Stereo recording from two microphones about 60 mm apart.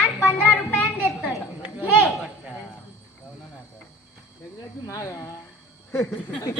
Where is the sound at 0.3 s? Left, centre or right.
Left.